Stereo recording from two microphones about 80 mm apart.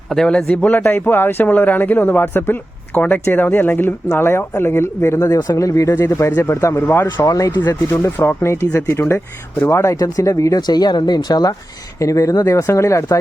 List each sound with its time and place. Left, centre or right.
0.1 s a man's voice: centre
0.8 s speech: left
7.3 s speech: left
10.0 s speech: left
10.6 s speech: left
11.9 s speech: left